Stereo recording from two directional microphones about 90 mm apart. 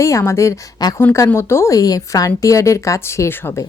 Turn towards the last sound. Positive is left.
turn(degrees=25)  # may be behind; listen again after turning